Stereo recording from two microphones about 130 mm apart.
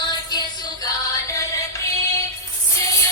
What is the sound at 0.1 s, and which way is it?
Music, 35° left (ahead or behind).